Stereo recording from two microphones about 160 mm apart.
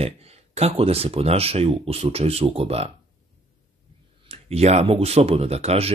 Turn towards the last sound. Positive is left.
turn(degrees=-40)  # may be behind; listen again after turning